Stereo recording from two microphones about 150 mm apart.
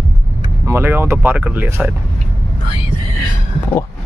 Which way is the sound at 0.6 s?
15° right (ahead or behind).